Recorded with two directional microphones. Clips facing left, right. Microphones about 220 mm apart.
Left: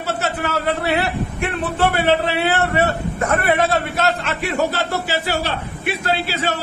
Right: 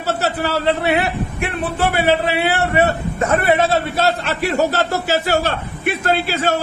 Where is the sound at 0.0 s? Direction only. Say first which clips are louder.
Right 3 dB; 35° right (ahead or behind).